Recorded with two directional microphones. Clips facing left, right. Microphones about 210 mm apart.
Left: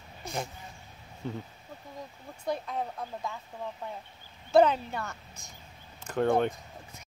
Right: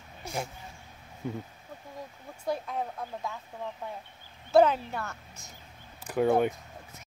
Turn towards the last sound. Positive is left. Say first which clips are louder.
# even
turn(degrees=-5)  # may be behind; listen again after turning